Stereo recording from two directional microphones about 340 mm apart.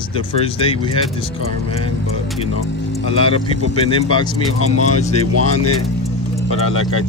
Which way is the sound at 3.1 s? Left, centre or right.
Centre.